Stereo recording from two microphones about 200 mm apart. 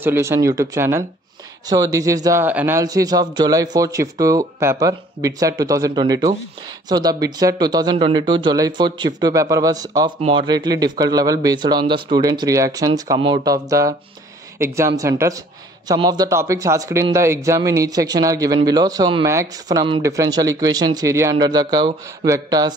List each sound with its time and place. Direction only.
0.0 s speech: 10° right (ahead or behind)